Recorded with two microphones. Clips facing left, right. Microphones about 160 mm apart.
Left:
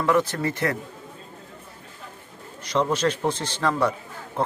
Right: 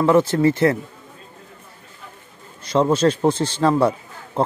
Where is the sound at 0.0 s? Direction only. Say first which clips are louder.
Right 7 dB; 30° right (ahead or behind).